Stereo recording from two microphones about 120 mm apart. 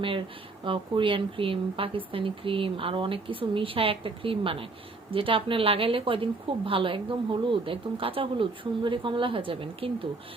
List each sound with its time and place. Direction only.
0.0 s speech: 45° right (ahead or behind)